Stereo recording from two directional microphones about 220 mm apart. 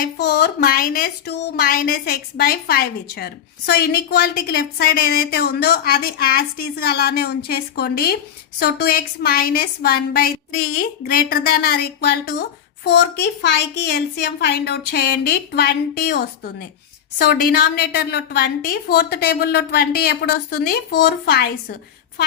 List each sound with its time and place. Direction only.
0.0 s a woman's voice: 50° left (ahead or behind)